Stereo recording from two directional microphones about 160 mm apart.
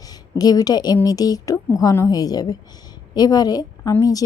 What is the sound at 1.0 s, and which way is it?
A woman's voice, 25° left (ahead or behind).